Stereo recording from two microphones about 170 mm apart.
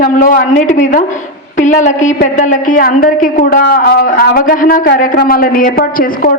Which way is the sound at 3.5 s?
70° left (ahead or behind).